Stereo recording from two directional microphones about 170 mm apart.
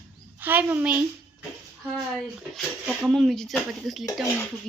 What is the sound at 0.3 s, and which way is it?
Speech, 10° right (ahead or behind).